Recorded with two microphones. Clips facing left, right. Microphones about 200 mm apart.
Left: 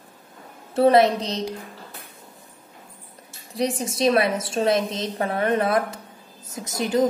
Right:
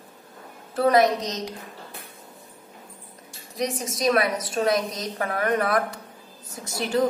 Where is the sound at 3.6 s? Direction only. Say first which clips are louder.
Left 4 dB; 30° left (ahead or behind).